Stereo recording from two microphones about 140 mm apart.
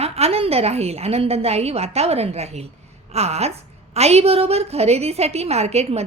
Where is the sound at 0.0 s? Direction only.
45° right (ahead or behind).